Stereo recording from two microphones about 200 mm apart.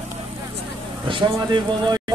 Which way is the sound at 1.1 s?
20° right (ahead or behind).